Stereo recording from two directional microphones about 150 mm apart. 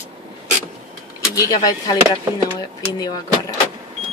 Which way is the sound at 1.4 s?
25° left (ahead or behind).